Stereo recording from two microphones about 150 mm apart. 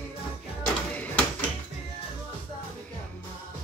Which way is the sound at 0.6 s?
10° left (ahead or behind).